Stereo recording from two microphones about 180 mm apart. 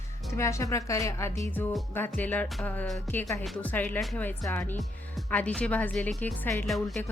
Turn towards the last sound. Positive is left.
turn(degrees=0)  # may be behind; listen again after turning